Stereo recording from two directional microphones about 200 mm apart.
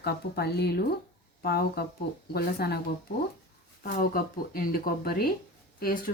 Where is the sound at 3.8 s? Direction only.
45° left (ahead or behind).